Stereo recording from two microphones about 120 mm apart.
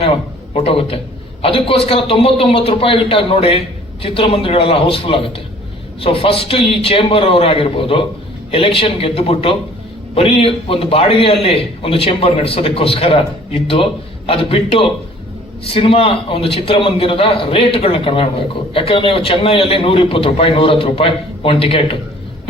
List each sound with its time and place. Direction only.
0.5 s a man's voice: 55° left (ahead or behind)